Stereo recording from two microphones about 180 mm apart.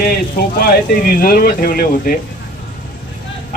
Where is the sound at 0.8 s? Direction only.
55° left (ahead or behind).